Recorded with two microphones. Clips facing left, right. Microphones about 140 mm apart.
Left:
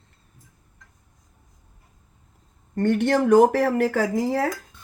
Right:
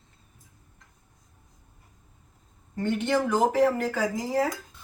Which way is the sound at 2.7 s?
70° left (ahead or behind).